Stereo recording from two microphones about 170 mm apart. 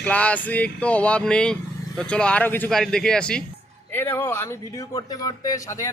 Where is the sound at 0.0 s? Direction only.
10° left (ahead or behind).